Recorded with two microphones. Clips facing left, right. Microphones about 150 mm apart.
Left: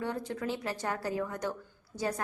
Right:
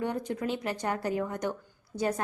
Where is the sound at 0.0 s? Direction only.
20° right (ahead or behind).